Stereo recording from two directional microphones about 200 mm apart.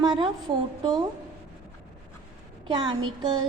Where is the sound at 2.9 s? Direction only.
20° right (ahead or behind).